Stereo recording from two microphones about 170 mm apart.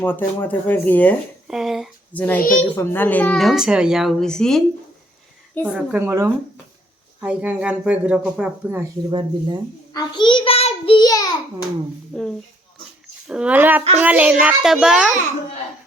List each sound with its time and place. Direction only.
0.0 s speech: 10° left (ahead or behind)
1.5 s a sound: centre (ahead or behind)
2.1 s speech: 10° left (ahead or behind)
2.4 s a child's voice: 55° left (ahead or behind)
2.7 s speech: 15° left (ahead or behind)
5.6 s speech: 5° right (ahead or behind)
9.0 s speech: 25° right (ahead or behind)
9.9 s a child's voice: 25° left (ahead or behind)
12.1 s speech: 5° left (ahead or behind)